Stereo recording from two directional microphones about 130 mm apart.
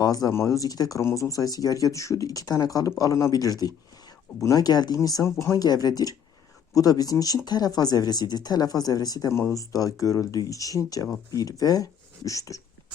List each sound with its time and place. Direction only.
0.0 s speech: 30° left (ahead or behind)